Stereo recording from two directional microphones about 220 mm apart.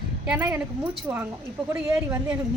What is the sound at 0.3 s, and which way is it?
A woman's voice, 5° right (ahead or behind).